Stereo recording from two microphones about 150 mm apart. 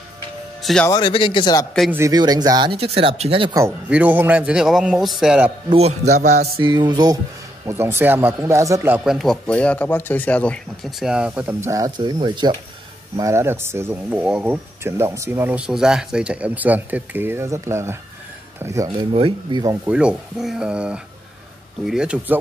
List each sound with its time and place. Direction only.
0.8 s speech: 30° left (ahead or behind)
1.9 s speech: 20° right (ahead or behind); by 3.5 s 35° right (ahead or behind)
3.9 s speech: 10° right (ahead or behind)
5.8 s speech: 45° right (ahead or behind)
6.6 s speech: 35° right (ahead or behind)
7.6 s speech: 15° right (ahead or behind)
13.2 s speech: 20° right (ahead or behind)
19.1 s speech: 35° right (ahead or behind)
19.9 s speech: 5° right (ahead or behind)